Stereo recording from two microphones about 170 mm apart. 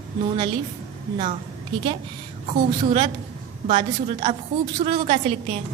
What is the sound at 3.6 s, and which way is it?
A woman's voice, 40° right (ahead or behind).